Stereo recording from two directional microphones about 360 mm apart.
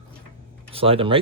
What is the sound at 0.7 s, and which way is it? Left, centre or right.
Speech, centre.